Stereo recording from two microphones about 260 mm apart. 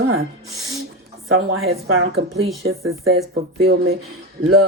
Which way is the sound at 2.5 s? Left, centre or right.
Centre.